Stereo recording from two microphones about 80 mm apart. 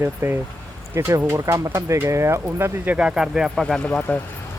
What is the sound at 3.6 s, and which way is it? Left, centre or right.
Speech, centre.